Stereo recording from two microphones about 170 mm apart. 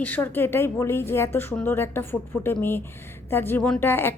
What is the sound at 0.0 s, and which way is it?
Speech, 10° left (ahead or behind).